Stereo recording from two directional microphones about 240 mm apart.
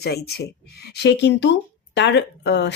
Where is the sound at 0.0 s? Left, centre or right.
Left.